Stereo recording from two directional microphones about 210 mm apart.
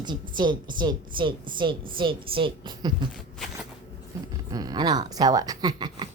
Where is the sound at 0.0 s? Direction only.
20° right (ahead or behind).